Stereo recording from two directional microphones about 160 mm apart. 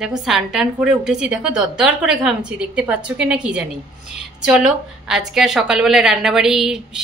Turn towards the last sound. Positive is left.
turn(degrees=-5)  # may be behind; listen again after turning